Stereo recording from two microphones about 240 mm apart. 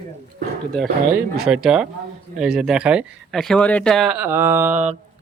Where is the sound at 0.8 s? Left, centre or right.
Centre.